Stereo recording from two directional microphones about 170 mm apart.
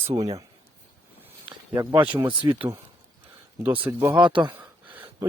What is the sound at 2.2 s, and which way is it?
Speech, 25° right (ahead or behind).